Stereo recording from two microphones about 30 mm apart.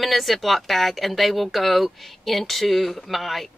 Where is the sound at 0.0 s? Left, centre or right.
Centre.